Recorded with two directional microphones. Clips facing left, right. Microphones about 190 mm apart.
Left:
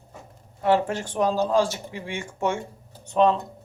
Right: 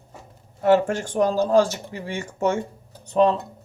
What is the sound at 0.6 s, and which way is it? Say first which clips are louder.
Speech: right 4 dB; 45° right (ahead or behind).